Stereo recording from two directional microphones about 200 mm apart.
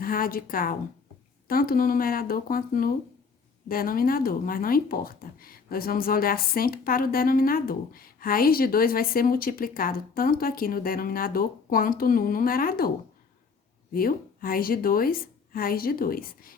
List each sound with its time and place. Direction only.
0.0 s speech: 45° left (ahead or behind)
13.9 s speech: 45° left (ahead or behind)